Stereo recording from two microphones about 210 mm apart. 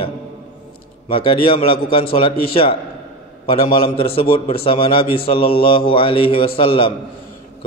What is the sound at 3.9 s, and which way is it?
A man's voice, 25° left (ahead or behind).